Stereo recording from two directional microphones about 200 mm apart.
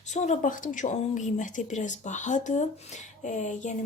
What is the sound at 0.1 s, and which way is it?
Speech, 40° left (ahead or behind).